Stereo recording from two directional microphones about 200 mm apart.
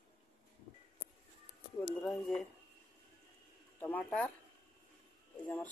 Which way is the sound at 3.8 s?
5° left (ahead or behind).